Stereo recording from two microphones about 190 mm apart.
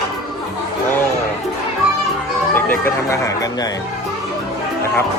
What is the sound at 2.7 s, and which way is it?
Speech, 10° left (ahead or behind).